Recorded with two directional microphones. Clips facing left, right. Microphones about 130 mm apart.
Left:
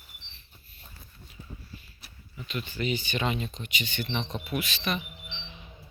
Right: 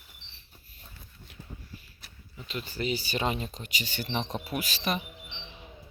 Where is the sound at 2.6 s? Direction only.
35° right (ahead or behind).